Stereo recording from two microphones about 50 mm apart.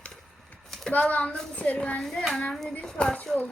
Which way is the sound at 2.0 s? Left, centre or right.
Centre.